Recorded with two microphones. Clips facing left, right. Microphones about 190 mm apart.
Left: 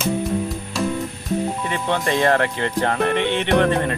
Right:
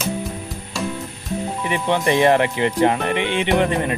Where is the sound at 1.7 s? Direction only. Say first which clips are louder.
Right 4 dB; 15° right (ahead or behind).